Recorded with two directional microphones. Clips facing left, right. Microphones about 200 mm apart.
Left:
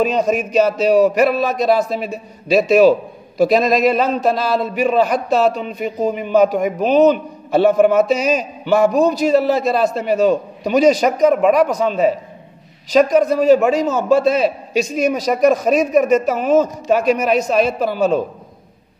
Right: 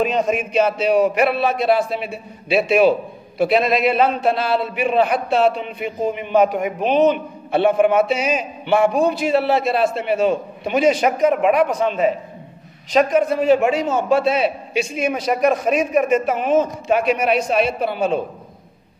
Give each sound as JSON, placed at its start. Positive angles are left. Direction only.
{"t": 0.0, "sound": "a man's voice", "side_deg": 40}